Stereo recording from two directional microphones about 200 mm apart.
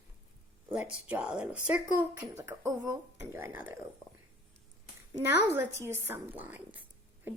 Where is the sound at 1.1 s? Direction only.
5° right (ahead or behind).